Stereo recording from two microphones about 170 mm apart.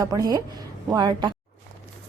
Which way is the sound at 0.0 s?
20° right (ahead or behind).